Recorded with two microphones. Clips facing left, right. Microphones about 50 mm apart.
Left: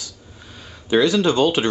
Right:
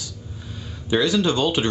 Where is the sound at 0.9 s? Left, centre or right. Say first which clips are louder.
Left 3 dB; left.